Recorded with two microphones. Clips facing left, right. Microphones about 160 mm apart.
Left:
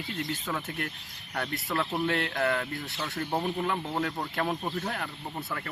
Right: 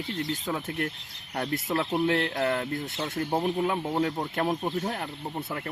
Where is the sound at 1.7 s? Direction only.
20° right (ahead or behind).